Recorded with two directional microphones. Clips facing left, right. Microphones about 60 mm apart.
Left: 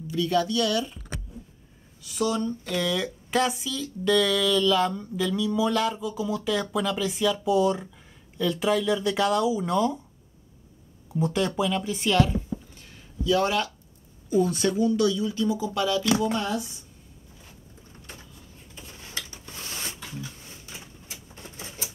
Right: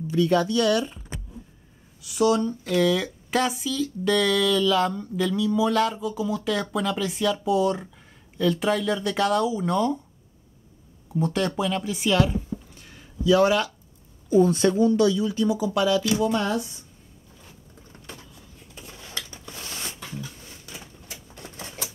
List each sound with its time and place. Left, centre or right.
0.1 s speech: right
2.0 s speech: centre
11.1 s speech: centre
13.3 s speech: right
14.4 s speech: right
16.3 s speech: right
19.3 s a sound: right
21.4 s typewriter: right